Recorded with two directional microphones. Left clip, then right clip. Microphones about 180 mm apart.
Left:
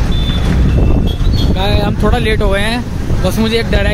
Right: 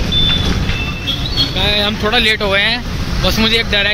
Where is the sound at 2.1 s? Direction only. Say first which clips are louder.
Right 4 dB; 20° left (ahead or behind).